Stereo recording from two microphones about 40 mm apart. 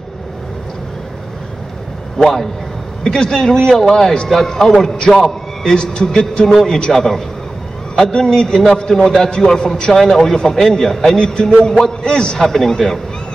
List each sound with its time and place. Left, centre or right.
2.1 s a man's voice: centre
6.4 s a man's voice: centre
12.4 s a man's voice: centre